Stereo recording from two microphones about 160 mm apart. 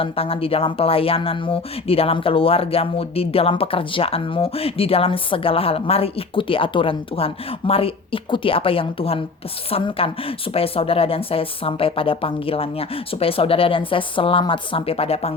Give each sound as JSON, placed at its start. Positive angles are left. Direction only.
{"t": 0.0, "sound": "speech", "side_deg": 35}